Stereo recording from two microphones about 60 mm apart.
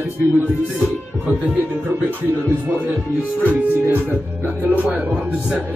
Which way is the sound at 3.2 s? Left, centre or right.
Right.